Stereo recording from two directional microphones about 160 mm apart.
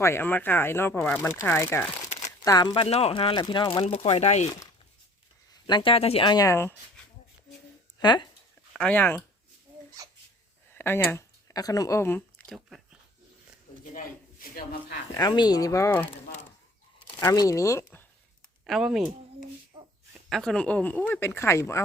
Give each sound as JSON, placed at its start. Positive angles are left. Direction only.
{"t": 0.0, "sound": "speech", "side_deg": 15}
{"t": 5.6, "sound": "speech", "side_deg": 30}
{"t": 6.3, "sound": "speech", "side_deg": 20}
{"t": 7.9, "sound": "speech", "side_deg": 25}
{"t": 8.7, "sound": "speech", "side_deg": 5}
{"t": 10.7, "sound": "speech", "side_deg": 15}
{"t": 12.5, "sound": "a sound", "side_deg": 0}
{"t": 13.9, "sound": "speech", "side_deg": 60}
{"t": 15.1, "sound": "speech", "side_deg": 25}
{"t": 17.1, "sound": "speech", "side_deg": 25}
{"t": 18.6, "sound": "speech", "side_deg": 0}
{"t": 20.3, "sound": "speech", "side_deg": 5}